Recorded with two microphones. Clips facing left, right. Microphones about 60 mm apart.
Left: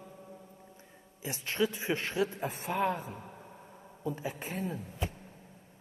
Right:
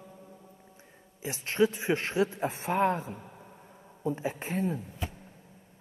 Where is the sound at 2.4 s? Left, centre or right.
Right.